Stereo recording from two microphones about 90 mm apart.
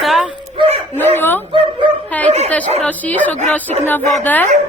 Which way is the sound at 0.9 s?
20° left (ahead or behind).